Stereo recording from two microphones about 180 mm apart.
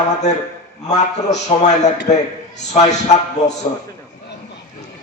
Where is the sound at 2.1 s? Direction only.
40° left (ahead or behind).